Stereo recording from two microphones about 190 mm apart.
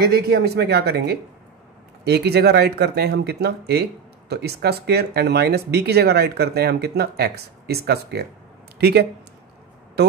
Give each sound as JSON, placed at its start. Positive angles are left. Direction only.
{"t": 0.0, "sound": "a man's voice", "side_deg": -55}